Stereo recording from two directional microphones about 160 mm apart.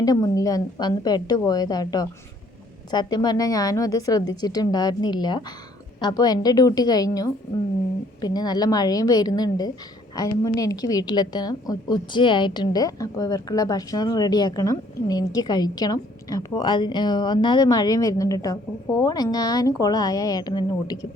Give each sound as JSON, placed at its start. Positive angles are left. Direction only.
{"t": 0.0, "sound": "a woman's voice", "side_deg": 20}